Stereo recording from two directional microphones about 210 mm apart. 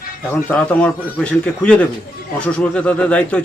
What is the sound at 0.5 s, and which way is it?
A man's voice, 5° left (ahead or behind).